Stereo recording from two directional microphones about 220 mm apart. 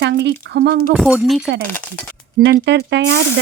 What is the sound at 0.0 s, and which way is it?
Speech, 50° right (ahead or behind).